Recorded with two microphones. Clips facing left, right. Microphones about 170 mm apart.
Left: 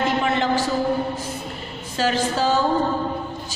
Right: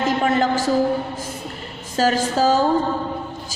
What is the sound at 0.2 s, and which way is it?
Speech, 45° right (ahead or behind).